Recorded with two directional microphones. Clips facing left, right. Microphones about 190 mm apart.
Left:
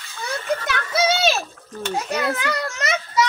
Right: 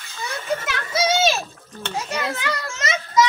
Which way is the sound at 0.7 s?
60° left (ahead or behind).